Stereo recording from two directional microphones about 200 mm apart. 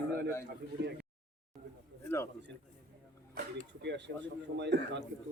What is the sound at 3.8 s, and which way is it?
A man's voice, 60° right (ahead or behind).